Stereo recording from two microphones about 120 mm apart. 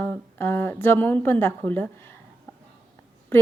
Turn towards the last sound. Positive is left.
turn(degrees=20)  # may be behind; listen again after turning